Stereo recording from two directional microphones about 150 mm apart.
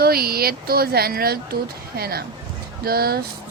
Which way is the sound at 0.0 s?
90° right.